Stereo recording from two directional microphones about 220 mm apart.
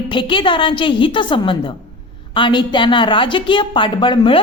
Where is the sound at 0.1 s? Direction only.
20° left (ahead or behind).